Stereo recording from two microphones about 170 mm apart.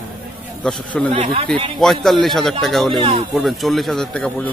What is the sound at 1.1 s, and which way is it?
Speech, 40° right (ahead or behind).